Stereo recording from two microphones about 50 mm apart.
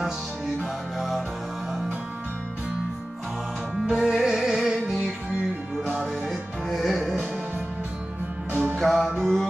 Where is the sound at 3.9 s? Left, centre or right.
Centre.